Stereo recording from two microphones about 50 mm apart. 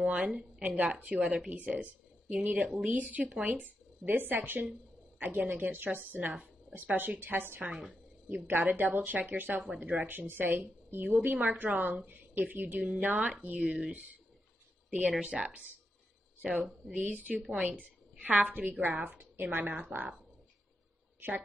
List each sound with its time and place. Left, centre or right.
0.0 s a woman's voice: right
11.2 s speech: right
16.9 s speech: right